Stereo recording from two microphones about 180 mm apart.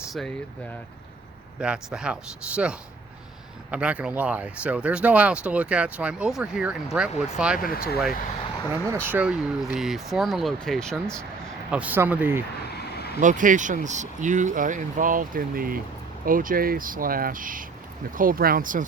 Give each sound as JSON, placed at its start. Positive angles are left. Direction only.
{"t": 1.6, "sound": "speech", "side_deg": -5}
{"t": 3.7, "sound": "speech", "side_deg": -5}
{"t": 7.7, "sound": "speech", "side_deg": 55}
{"t": 8.7, "sound": "speech", "side_deg": -10}
{"t": 11.7, "sound": "speech", "side_deg": -10}
{"t": 12.6, "sound": "vehicle", "side_deg": 65}
{"t": 13.1, "sound": "speech", "side_deg": -45}